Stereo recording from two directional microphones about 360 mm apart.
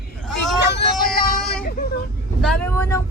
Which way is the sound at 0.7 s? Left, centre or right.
Left.